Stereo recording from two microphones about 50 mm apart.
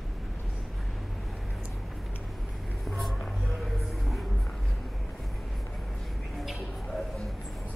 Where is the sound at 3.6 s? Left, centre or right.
Centre.